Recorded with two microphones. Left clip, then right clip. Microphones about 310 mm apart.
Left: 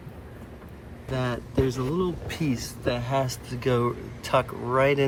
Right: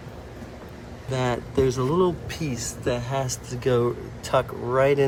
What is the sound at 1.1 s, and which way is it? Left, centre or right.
Speech, centre.